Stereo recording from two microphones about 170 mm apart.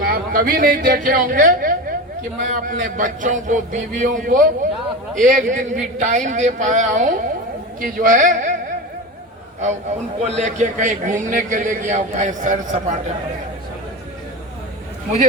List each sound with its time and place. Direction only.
0.0 s a man's voice: 60° right (ahead or behind)
10.2 s a man's voice: 40° right (ahead or behind)